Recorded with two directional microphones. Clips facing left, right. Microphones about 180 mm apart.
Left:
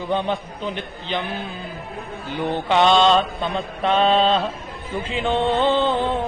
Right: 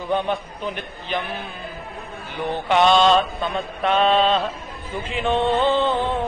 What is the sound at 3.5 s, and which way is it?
Mantra, 35° left (ahead or behind).